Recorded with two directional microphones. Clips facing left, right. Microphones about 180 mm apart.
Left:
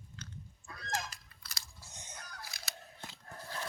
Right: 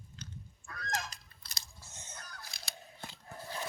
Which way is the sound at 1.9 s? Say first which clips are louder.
Even; 15° left (ahead or behind).